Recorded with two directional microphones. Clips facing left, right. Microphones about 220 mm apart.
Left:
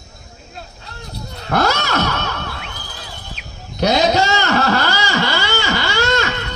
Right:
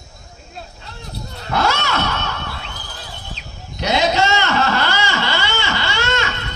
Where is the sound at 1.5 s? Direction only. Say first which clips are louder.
Left 2 dB; 40° left (ahead or behind).